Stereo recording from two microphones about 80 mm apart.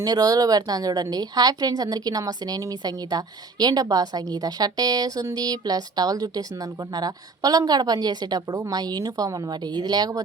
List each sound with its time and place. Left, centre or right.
0.0 s a woman's voice: right